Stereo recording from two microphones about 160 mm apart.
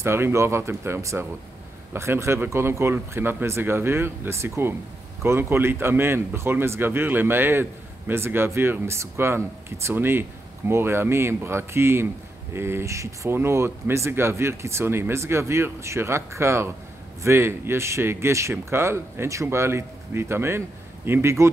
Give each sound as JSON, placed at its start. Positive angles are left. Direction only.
{"t": 0.0, "sound": "speech", "side_deg": -15}